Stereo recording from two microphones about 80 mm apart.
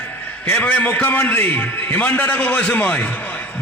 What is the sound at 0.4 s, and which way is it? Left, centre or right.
A man's voice, centre.